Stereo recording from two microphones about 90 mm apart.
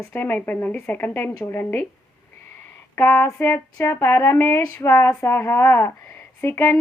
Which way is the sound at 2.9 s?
25° left (ahead or behind).